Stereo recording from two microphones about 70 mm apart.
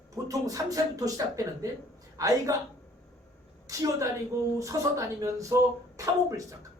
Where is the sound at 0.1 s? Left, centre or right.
Right.